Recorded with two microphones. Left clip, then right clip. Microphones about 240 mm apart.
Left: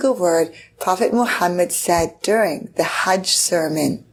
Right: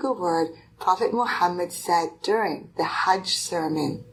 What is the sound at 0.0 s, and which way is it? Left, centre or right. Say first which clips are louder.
Speech: left 7 dB; left.